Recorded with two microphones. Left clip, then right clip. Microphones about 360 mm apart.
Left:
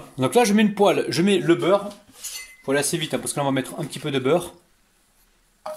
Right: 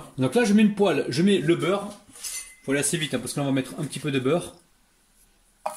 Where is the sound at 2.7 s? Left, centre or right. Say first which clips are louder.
Left 3 dB; centre.